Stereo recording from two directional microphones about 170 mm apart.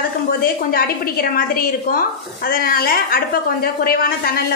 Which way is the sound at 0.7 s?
60° left (ahead or behind).